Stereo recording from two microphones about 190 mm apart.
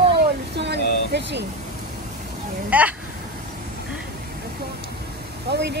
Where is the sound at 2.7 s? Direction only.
10° right (ahead or behind).